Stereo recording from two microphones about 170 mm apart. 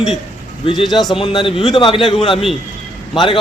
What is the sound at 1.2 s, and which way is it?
Speech, 30° left (ahead or behind).